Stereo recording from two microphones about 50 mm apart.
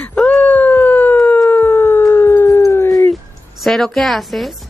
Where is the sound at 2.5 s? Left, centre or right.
Left.